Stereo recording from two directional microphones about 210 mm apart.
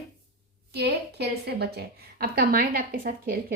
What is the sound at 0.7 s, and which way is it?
A woman's voice, 50° right (ahead or behind).